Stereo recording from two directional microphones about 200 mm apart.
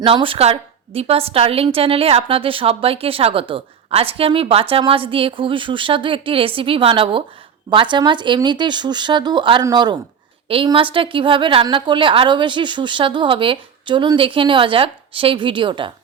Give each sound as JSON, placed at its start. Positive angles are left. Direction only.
{"t": 0.0, "sound": "a woman's voice", "side_deg": -25}